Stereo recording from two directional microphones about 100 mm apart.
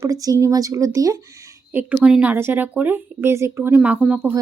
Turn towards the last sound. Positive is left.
turn(degrees=-10)  # may be behind; listen again after turning